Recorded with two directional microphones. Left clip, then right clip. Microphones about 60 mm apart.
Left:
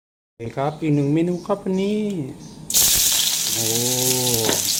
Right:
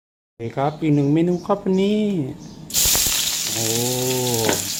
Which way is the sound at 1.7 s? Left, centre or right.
Right.